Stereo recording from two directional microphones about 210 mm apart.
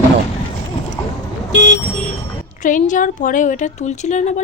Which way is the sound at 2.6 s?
40° left (ahead or behind).